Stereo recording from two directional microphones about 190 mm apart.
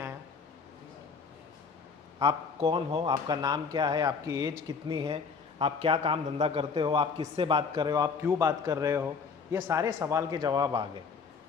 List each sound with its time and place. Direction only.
2.1 s a man's voice: 25° right (ahead or behind)